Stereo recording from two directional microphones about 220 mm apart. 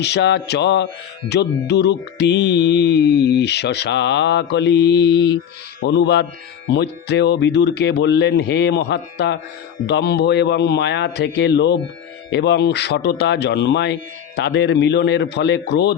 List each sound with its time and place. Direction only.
0.0 s mantra: 50° left (ahead or behind)